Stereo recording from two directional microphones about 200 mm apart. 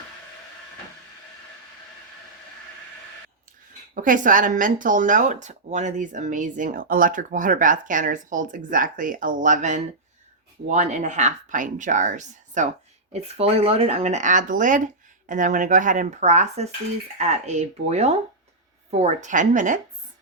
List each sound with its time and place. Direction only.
3.9 s speech: 40° right (ahead or behind)